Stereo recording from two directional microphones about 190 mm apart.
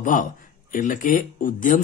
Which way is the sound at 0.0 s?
45° left (ahead or behind).